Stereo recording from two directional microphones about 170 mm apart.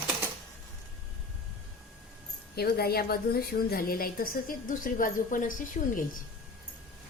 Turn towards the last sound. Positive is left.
turn(degrees=55)  # may be behind; listen again after turning